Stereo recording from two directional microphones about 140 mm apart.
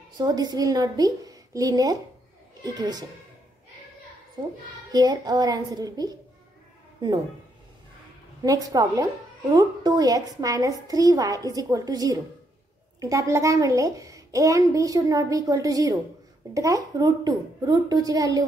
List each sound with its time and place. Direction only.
0.2 s speech: 30° right (ahead or behind)
4.4 s speech: 30° right (ahead or behind)
8.4 s speech: 25° right (ahead or behind)